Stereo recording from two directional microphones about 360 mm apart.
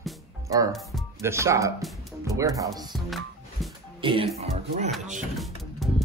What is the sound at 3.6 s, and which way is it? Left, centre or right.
Music, centre.